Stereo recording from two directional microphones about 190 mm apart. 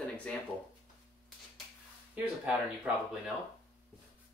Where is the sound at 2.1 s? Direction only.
5° right (ahead or behind).